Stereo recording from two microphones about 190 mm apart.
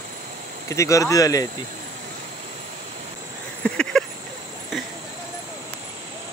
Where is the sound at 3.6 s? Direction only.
5° left (ahead or behind).